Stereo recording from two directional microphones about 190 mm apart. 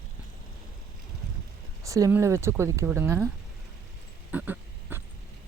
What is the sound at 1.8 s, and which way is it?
Speech, 15° right (ahead or behind).